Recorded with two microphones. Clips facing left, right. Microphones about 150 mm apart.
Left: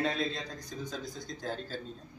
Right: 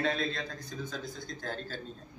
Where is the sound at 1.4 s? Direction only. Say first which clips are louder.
Left 2 dB; 10° left (ahead or behind).